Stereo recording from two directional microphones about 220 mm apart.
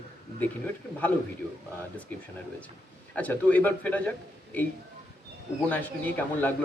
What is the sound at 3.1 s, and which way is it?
A man's voice, 5° left (ahead or behind).